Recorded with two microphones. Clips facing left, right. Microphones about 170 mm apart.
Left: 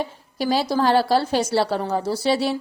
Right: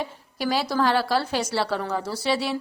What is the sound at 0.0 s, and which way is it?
A woman's voice, 30° left (ahead or behind).